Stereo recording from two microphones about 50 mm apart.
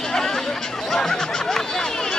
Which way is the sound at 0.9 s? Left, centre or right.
Centre.